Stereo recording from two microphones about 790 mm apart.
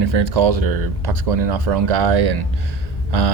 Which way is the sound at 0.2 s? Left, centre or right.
Right.